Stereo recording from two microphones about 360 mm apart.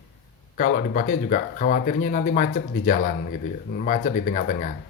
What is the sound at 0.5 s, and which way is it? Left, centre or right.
Speech, left.